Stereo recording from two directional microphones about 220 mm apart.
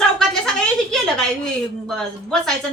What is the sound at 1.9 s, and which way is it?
Speech, centre (ahead or behind).